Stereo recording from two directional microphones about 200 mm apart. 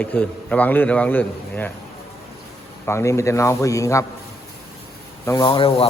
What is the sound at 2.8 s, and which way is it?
A man's voice, 15° left (ahead or behind).